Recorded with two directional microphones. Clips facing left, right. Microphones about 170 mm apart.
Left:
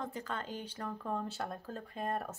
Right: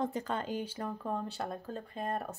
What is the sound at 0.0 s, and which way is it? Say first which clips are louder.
Speech: right 6 dB; 20° right (ahead or behind).